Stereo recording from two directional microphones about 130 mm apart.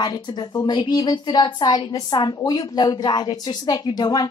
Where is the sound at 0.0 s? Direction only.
30° left (ahead or behind).